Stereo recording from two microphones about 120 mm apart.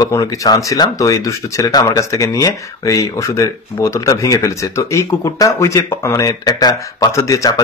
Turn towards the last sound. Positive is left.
turn(degrees=30)  # may be behind; listen again after turning